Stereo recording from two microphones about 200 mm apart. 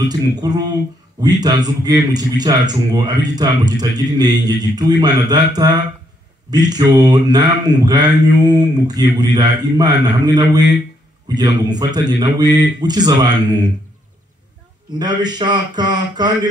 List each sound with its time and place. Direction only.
0.4 s a man's voice: 20° right (ahead or behind)
15.0 s a man's voice: 20° right (ahead or behind)